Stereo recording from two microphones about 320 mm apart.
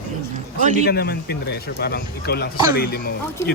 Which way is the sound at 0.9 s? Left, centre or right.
Left.